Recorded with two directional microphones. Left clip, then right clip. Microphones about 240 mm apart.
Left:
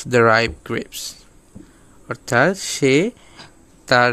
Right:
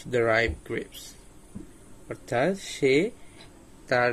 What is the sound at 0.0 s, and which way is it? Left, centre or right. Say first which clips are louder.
Speech: left 9 dB; left.